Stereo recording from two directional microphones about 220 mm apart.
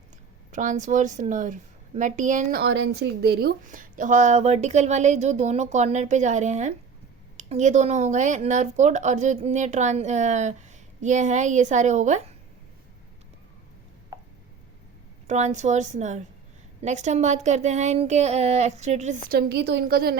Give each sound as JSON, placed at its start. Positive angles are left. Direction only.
{"t": 0.5, "sound": "a woman's voice", "side_deg": -35}
{"t": 15.3, "sound": "a woman's voice", "side_deg": -30}